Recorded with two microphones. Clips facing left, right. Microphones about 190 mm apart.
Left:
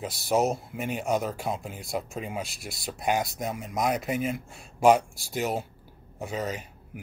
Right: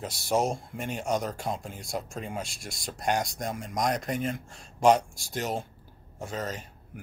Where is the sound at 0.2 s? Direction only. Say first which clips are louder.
Left 2 dB; 5° left (ahead or behind).